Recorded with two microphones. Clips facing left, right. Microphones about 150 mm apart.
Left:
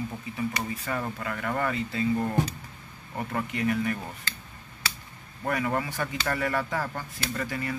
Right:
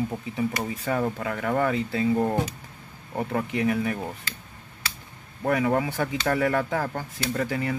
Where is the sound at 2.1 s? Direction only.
20° right (ahead or behind).